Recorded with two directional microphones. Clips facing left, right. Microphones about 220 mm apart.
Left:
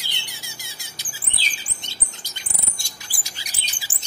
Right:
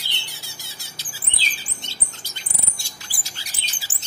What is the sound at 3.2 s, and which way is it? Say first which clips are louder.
Bird: even; 15° left (ahead or behind).